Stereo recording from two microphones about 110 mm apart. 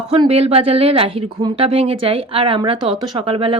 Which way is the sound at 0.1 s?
60° right (ahead or behind).